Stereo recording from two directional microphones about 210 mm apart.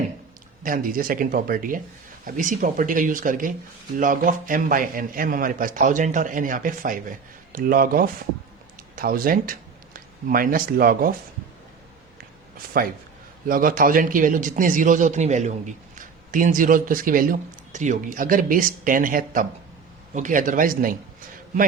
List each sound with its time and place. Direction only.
0.6 s speech: 40° right (ahead or behind)
12.7 s speech: 45° right (ahead or behind)